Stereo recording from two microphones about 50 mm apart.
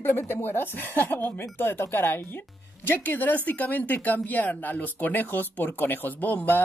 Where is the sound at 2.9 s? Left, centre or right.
Left.